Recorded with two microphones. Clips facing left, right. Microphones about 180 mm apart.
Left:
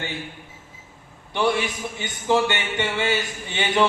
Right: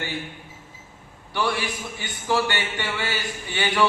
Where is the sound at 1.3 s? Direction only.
20° left (ahead or behind).